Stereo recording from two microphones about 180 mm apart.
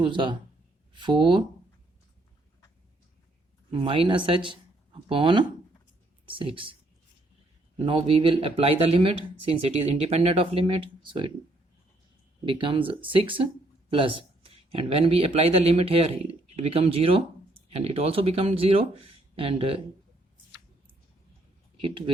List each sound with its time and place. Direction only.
0.0 s speech: 25° right (ahead or behind)
3.7 s speech: 30° right (ahead or behind)
7.9 s speech: 30° right (ahead or behind)
12.5 s speech: 30° right (ahead or behind)
21.8 s speech: 30° right (ahead or behind)